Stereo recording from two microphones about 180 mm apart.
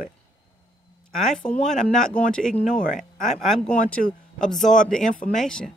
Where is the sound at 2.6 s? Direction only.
45° left (ahead or behind).